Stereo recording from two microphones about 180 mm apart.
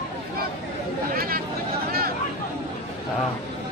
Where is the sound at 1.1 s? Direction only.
55° right (ahead or behind).